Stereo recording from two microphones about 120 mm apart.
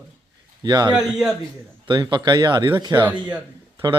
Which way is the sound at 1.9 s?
40° right (ahead or behind).